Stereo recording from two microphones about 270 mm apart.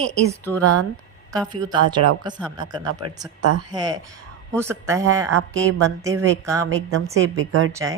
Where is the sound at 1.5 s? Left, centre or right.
Centre.